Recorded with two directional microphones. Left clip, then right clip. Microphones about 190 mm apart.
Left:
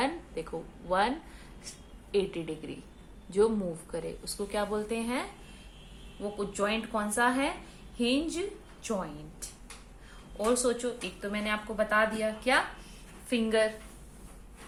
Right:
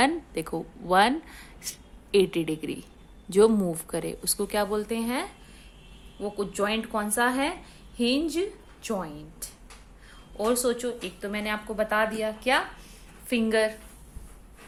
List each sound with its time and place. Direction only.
0.0 s a woman's voice: 60° right (ahead or behind)
6.3 s a woman's voice: 50° right (ahead or behind)